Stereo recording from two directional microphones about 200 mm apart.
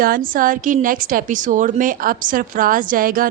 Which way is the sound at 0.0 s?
45° right (ahead or behind).